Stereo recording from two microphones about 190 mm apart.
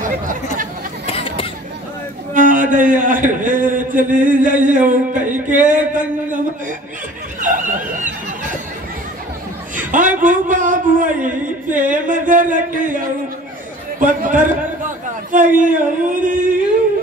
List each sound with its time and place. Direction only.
0.0 s chatter: 45° right (ahead or behind)
1.0 s a sound: 30° left (ahead or behind)
2.3 s a man's voice: 45° right (ahead or behind)
7.3 s snicker: 45° right (ahead or behind)
9.8 s a man's voice: 45° right (ahead or behind)